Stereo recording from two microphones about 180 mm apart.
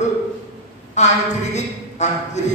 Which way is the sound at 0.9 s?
40° left (ahead or behind).